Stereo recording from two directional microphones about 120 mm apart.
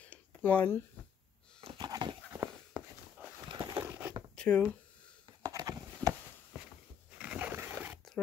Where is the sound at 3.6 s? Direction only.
25° right (ahead or behind).